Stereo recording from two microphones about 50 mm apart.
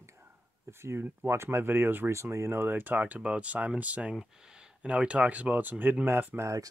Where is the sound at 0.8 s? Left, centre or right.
Right.